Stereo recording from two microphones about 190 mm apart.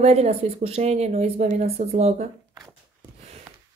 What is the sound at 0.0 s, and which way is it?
A woman's voice, 35° right (ahead or behind).